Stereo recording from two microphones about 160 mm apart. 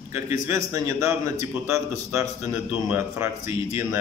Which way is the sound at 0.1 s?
20° right (ahead or behind).